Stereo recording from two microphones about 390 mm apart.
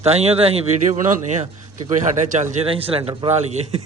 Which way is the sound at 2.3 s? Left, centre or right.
Centre.